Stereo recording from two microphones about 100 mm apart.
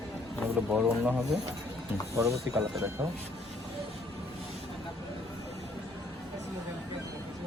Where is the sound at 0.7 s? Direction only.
15° right (ahead or behind).